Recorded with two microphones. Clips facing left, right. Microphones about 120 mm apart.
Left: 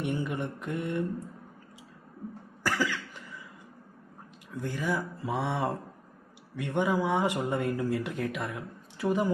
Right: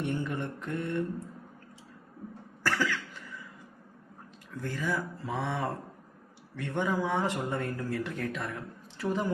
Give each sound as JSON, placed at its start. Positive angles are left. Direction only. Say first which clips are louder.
{"t": 0.0, "sound": "mantra", "louder": "left 1 dB", "side_deg": 15}
{"t": 2.6, "sound": "cough", "louder": "even", "side_deg": 15}
{"t": 4.5, "sound": "speech", "louder": "left 2 dB", "side_deg": 15}